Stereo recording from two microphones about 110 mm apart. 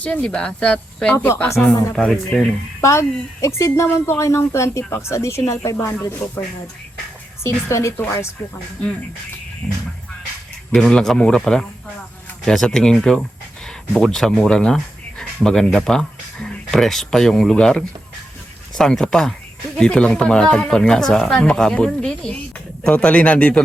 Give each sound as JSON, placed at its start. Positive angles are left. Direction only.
{"t": 0.0, "sound": "speech", "side_deg": 10}
{"t": 1.6, "sound": "speech", "side_deg": 5}
{"t": 2.8, "sound": "speech", "side_deg": 25}
{"t": 7.4, "sound": "speech", "side_deg": 25}
{"t": 9.6, "sound": "speech", "side_deg": 0}